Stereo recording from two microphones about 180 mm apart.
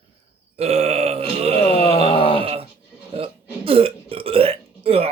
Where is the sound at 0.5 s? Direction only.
35° right (ahead or behind).